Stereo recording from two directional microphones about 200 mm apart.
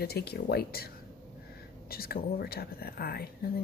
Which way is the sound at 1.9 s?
50° left (ahead or behind).